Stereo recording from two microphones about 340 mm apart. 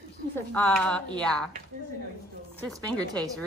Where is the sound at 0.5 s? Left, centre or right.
Centre.